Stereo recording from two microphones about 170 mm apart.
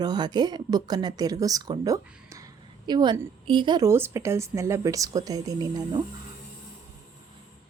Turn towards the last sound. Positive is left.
turn(degrees=-20)  # may be behind; listen again after turning